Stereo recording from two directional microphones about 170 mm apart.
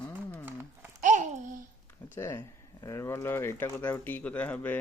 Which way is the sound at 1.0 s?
50° right (ahead or behind).